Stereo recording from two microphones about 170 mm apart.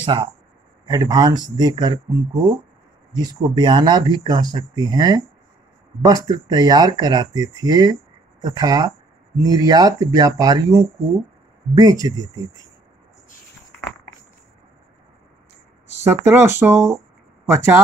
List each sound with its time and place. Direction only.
0.0 s speech: 30° right (ahead or behind)
3.2 s speech: 25° right (ahead or behind)
16.0 s speech: 15° right (ahead or behind)